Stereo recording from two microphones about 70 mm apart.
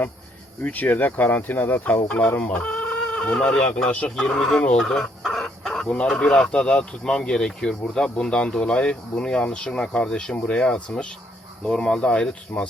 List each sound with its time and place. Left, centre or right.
0.6 s speech: left
4.2 s speech: centre
4.8 s chicken: centre
5.9 s speech: centre